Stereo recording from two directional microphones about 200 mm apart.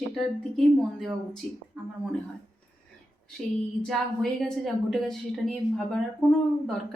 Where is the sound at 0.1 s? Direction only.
Centre (ahead or behind).